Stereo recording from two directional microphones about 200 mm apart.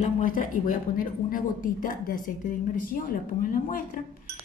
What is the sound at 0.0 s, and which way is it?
A woman's voice, 40° left (ahead or behind).